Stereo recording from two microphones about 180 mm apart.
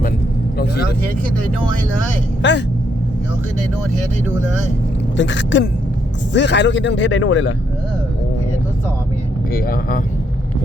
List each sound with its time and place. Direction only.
2.4 s speech: 80° left
5.1 s speech: 85° left
6.3 s a man's voice: 75° left (ahead or behind)
9.5 s speech: 55° left (ahead or behind)